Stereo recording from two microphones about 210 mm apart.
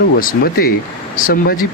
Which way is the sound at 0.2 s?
45° left (ahead or behind).